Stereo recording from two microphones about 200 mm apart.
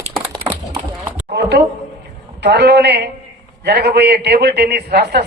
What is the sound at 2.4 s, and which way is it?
A man's voice, 55° right (ahead or behind).